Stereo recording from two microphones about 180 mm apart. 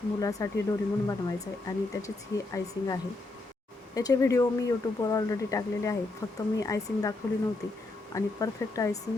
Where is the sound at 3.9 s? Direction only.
20° left (ahead or behind).